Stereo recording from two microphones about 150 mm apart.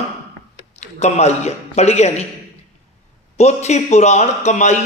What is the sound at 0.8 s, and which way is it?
A man's voice, 45° left (ahead or behind).